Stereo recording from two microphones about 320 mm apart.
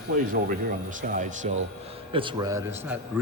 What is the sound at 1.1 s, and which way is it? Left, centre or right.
A man's voice, right.